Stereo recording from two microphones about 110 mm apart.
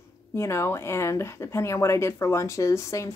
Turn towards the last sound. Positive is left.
turn(degrees=30)  # may be behind; listen again after turning